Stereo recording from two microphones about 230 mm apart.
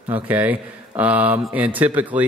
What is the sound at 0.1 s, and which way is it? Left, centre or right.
Speech, centre.